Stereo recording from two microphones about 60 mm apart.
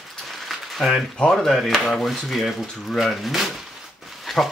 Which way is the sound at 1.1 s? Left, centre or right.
Centre.